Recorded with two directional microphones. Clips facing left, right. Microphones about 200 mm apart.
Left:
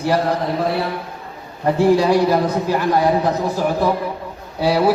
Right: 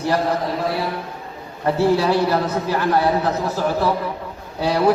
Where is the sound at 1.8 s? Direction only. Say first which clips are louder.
Left 3 dB; 15° left (ahead or behind).